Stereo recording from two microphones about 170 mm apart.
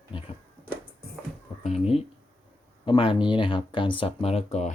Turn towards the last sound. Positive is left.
turn(degrees=40)  # may be behind; listen again after turning